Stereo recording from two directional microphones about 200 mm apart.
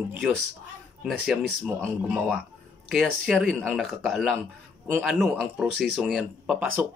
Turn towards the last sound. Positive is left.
turn(degrees=-5)  # may be behind; listen again after turning